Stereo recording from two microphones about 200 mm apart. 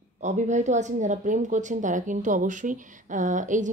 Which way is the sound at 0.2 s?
35° right (ahead or behind).